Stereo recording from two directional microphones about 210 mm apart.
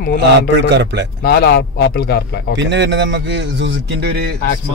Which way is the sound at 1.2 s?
50° left (ahead or behind).